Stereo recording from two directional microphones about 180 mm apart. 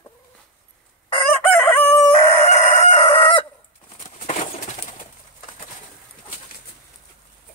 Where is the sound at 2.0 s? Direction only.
35° left (ahead or behind).